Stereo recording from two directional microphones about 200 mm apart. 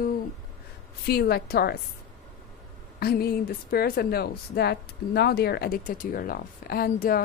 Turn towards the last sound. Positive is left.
turn(degrees=45)  # may be behind; listen again after turning